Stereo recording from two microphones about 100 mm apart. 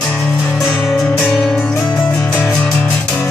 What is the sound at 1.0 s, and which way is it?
Music, 5° left (ahead or behind).